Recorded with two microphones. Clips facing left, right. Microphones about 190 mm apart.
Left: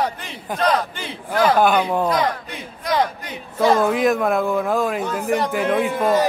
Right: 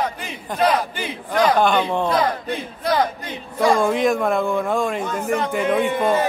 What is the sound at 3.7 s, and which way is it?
A man's voice, 5° left (ahead or behind).